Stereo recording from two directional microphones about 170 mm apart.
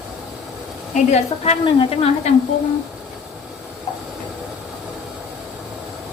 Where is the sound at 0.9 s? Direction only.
45° left (ahead or behind).